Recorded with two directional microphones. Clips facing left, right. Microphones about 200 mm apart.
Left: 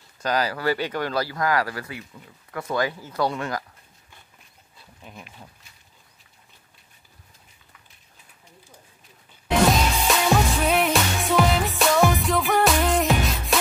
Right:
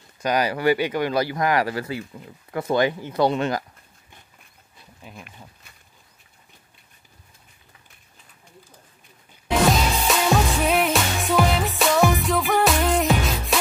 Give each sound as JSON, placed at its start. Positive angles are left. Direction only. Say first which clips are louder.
{"t": 0.2, "sound": "speech", "louder": "right 3 dB", "side_deg": -15}
{"t": 5.0, "sound": "speech", "louder": "right 1 dB", "side_deg": 0}
{"t": 9.7, "sound": "music", "louder": "even", "side_deg": 0}